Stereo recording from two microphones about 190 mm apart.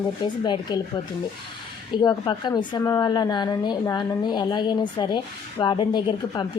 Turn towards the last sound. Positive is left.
turn(degrees=25)  # may be behind; listen again after turning